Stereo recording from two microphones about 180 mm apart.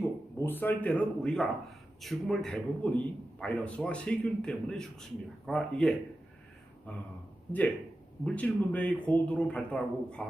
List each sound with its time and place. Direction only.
0.0 s a man's voice: 10° left (ahead or behind)
8.2 s a man's voice: 10° left (ahead or behind)